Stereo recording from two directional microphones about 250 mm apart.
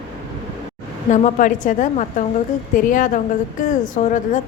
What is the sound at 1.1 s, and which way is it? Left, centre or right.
A woman's voice, left.